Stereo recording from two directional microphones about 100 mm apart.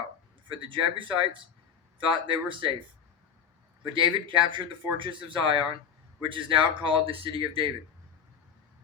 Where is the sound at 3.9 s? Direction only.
55° right (ahead or behind).